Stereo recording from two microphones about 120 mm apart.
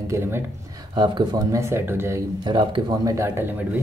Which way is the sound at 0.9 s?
35° right (ahead or behind).